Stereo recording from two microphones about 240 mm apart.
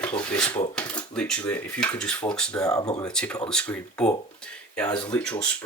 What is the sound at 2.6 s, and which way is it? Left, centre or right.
Speech, centre.